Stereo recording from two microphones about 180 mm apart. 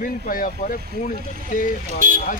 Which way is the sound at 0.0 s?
50° left (ahead or behind).